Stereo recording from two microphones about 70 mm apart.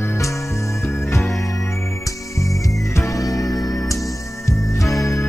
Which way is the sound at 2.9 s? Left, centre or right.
Left.